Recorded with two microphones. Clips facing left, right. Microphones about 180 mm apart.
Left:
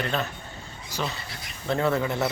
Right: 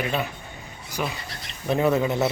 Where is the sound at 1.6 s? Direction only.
15° right (ahead or behind).